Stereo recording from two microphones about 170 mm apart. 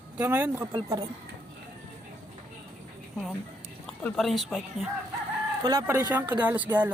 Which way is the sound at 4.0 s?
5° left (ahead or behind).